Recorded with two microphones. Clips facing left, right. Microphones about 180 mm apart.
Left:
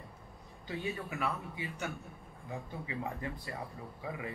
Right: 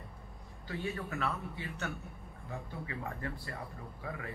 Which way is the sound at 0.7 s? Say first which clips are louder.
Even; 15° left (ahead or behind).